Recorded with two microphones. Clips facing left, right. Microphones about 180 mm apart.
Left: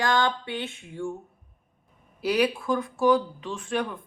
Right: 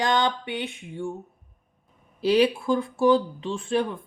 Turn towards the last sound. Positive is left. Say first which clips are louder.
# right 4 dB
turn(degrees=-30)  # may be behind; listen again after turning